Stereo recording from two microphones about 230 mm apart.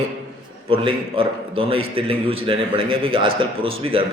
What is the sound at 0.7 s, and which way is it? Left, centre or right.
A man's voice, right.